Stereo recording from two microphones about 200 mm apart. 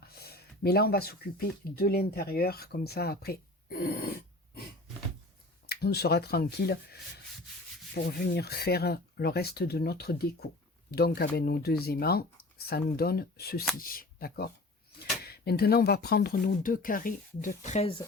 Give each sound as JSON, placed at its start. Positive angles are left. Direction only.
{"t": 0.0, "sound": "speech", "side_deg": 50}
{"t": 5.6, "sound": "speech", "side_deg": 55}